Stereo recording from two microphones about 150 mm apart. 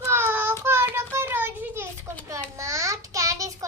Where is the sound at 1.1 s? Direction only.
15° right (ahead or behind).